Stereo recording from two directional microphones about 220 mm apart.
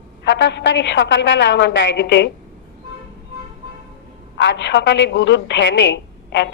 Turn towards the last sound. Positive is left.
turn(degrees=55)  # may be behind; listen again after turning